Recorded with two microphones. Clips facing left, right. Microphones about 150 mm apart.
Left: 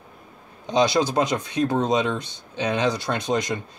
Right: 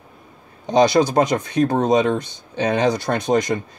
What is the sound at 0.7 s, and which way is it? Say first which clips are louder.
A man's voice: right 5 dB; 50° right (ahead or behind).